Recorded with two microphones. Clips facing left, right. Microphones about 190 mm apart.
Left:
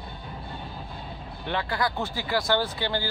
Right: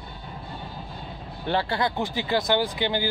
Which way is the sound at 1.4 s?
30° right (ahead or behind).